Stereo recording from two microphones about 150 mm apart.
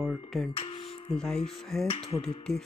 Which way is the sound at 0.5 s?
40° left (ahead or behind).